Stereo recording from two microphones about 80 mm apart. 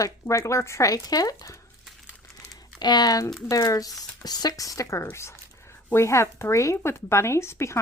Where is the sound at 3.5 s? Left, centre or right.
Left.